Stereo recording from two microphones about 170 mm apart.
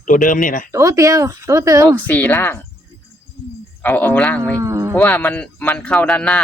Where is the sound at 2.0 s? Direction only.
10° left (ahead or behind).